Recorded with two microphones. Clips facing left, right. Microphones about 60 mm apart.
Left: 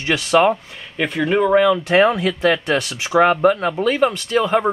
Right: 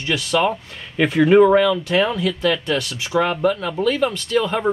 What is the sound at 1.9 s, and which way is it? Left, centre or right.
Speech, left.